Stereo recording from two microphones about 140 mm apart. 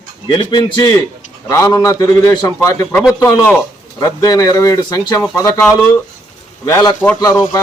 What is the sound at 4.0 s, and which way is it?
Speech, 25° left (ahead or behind).